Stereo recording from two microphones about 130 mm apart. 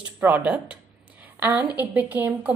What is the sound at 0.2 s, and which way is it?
A woman's voice, 10° right (ahead or behind).